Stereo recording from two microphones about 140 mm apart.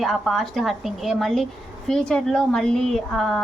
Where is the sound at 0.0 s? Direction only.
Centre (ahead or behind).